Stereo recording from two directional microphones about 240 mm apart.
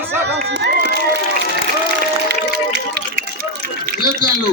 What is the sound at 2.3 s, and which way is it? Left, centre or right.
Run, right.